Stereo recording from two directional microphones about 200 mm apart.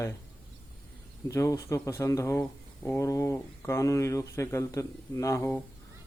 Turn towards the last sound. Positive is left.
turn(degrees=15)  # may be behind; listen again after turning